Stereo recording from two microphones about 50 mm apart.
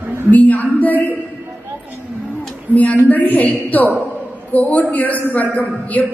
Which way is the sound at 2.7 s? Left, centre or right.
Left.